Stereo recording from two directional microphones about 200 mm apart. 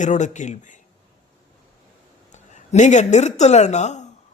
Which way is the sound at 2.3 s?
35° left (ahead or behind).